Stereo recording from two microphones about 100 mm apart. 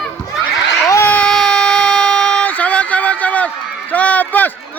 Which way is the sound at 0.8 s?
30° left (ahead or behind).